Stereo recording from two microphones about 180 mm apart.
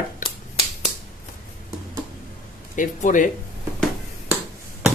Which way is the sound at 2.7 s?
45° left (ahead or behind).